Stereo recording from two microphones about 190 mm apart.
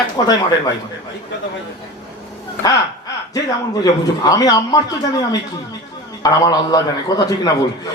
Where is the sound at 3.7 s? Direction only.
20° left (ahead or behind).